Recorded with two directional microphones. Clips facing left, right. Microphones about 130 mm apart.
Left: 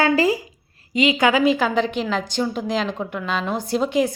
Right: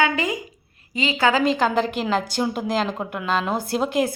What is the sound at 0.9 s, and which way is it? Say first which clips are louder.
Speech: left 3 dB; 20° left (ahead or behind).